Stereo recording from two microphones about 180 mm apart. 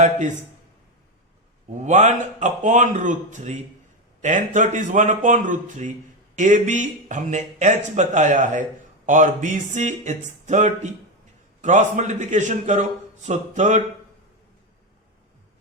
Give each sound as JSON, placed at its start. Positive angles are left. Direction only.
{"t": 1.8, "sound": "a man's voice", "side_deg": -40}